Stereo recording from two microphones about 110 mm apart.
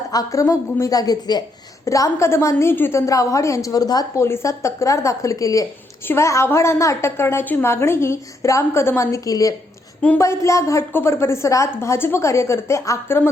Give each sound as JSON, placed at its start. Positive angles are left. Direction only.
{"t": 0.1, "sound": "a woman's voice", "side_deg": 30}